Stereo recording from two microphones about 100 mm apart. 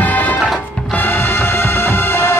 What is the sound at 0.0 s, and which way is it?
Music, 15° left (ahead or behind).